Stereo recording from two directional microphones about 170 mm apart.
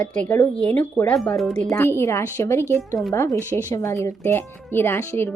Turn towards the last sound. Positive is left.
turn(degrees=15)  # may be behind; listen again after turning